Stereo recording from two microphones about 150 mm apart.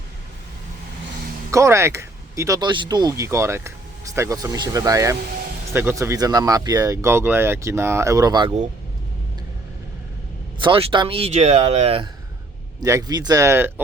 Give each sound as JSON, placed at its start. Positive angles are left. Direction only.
{"t": 1.5, "sound": "speech", "side_deg": -20}
{"t": 10.6, "sound": "speech", "side_deg": -35}
{"t": 12.8, "sound": "speech", "side_deg": -20}